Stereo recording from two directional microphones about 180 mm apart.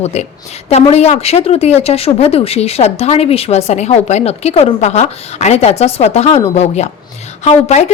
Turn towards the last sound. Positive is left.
turn(degrees=40)  # may be behind; listen again after turning